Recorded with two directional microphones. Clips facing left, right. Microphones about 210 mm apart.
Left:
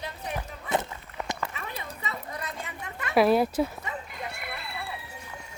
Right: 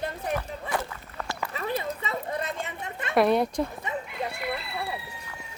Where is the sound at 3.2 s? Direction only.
5° left (ahead or behind).